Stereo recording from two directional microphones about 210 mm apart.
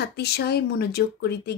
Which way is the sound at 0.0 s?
50° left (ahead or behind).